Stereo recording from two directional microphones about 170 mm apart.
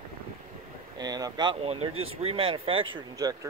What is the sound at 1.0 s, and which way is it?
Speech, 20° right (ahead or behind).